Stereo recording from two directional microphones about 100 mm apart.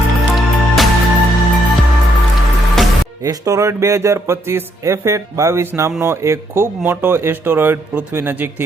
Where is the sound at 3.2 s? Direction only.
35° right (ahead or behind).